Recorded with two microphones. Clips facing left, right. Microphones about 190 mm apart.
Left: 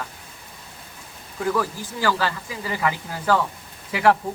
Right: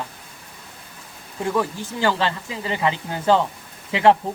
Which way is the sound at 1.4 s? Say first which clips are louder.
Right 1 dB; 25° right (ahead or behind).